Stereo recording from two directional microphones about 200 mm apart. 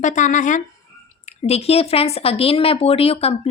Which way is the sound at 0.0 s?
40° left (ahead or behind).